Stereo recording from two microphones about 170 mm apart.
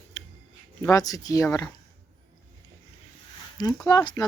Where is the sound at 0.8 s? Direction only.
20° left (ahead or behind).